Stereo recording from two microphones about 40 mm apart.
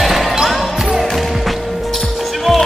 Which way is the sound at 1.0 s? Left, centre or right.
Centre.